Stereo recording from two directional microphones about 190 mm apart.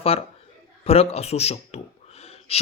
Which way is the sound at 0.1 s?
30° left (ahead or behind).